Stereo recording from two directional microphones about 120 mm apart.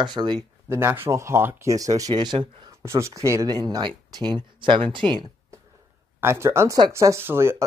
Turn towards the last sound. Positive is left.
turn(degrees=-20)  # may be behind; listen again after turning